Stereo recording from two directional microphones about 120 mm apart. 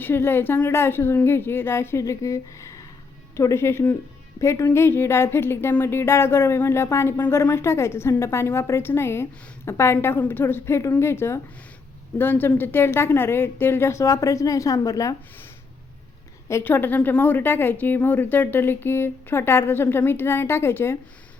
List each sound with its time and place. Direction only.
0.0 s speech: 20° left (ahead or behind)
16.5 s speech: 20° left (ahead or behind)